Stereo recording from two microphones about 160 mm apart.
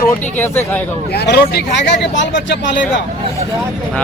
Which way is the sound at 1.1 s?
85° left.